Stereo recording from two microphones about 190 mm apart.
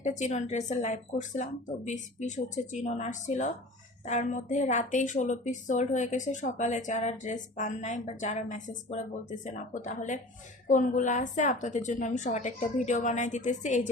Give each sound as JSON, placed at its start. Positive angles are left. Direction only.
{"t": 0.0, "sound": "a woman's voice", "side_deg": 40}